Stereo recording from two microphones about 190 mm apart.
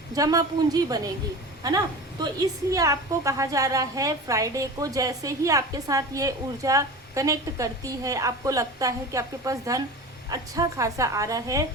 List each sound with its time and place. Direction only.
0.2 s a woman's voice: 20° right (ahead or behind)